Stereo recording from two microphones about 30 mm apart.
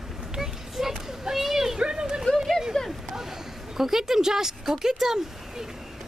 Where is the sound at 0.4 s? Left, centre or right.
Centre.